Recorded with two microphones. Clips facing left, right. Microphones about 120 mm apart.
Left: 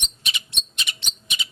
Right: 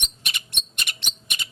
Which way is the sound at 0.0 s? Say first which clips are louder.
Left 1 dB; 55° right (ahead or behind).